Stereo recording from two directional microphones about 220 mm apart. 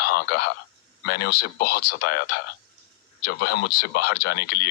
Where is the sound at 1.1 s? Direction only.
45° left (ahead or behind).